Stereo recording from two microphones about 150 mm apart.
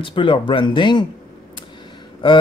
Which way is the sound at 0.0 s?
35° left (ahead or behind).